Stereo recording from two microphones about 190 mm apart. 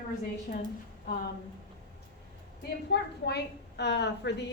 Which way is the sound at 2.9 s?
60° left (ahead or behind).